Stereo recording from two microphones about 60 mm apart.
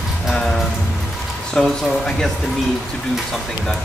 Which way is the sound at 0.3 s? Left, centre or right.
Centre.